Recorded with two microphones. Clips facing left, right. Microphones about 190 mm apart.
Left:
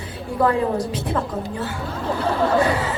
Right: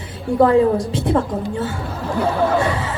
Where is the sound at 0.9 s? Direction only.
30° right (ahead or behind).